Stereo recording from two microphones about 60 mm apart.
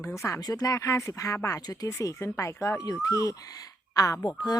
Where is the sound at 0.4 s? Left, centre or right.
Left.